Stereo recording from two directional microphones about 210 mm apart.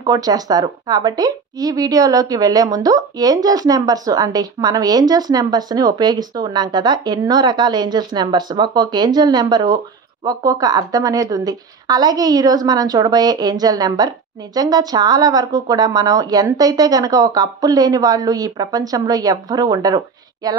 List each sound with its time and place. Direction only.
0.0 s speech: 20° right (ahead or behind)